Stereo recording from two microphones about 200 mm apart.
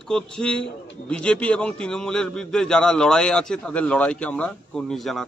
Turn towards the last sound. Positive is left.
turn(degrees=0)  # may be behind; listen again after turning